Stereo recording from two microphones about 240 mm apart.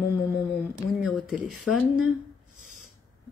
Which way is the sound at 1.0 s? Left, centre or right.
Centre.